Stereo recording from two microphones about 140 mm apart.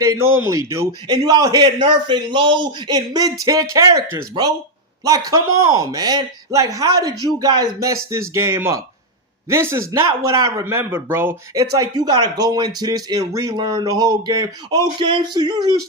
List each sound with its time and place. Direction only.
0.0 s a man's voice: 20° right (ahead or behind)